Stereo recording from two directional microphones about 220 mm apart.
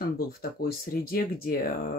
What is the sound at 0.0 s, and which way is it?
Speech, 45° left (ahead or behind).